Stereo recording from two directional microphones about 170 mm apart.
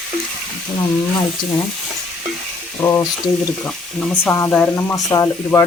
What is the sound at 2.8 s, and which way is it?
Speech, 10° left (ahead or behind).